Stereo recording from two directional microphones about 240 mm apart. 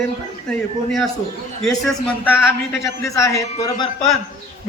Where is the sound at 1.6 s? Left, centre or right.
Centre.